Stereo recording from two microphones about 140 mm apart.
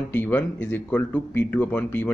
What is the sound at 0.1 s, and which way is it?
Speech, 15° left (ahead or behind).